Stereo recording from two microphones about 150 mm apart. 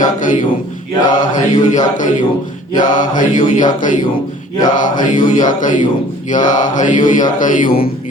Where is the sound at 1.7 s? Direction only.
55° left (ahead or behind).